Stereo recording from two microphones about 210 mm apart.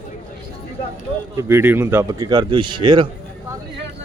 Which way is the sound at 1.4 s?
10° right (ahead or behind).